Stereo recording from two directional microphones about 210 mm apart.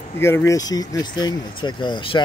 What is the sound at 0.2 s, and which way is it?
Speech, 10° left (ahead or behind).